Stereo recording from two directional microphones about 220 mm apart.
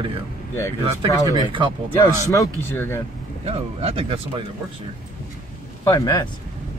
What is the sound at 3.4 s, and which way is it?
Speech, 25° right (ahead or behind).